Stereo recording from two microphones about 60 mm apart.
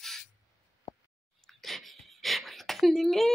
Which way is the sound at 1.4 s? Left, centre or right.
Centre.